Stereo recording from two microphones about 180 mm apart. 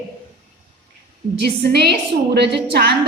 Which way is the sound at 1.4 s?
65° right (ahead or behind).